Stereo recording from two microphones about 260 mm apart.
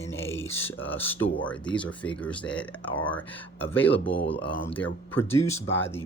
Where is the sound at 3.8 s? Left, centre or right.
Left.